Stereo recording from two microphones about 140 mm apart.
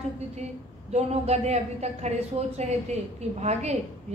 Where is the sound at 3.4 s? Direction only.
50° right (ahead or behind).